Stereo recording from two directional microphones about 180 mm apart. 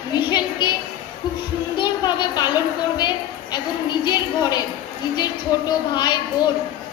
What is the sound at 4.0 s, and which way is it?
Speech, 25° left (ahead or behind).